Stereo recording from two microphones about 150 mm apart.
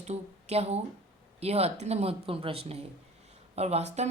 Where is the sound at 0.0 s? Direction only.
45° right (ahead or behind).